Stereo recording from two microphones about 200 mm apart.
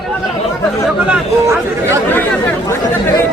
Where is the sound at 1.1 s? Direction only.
15° right (ahead or behind).